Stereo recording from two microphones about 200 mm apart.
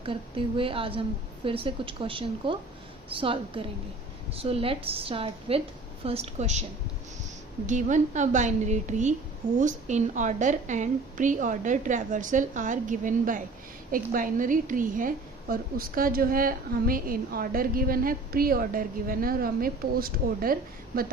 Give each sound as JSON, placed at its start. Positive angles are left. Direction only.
{"t": 0.0, "sound": "a woman's voice", "side_deg": -25}
{"t": 7.7, "sound": "a woman's voice", "side_deg": -40}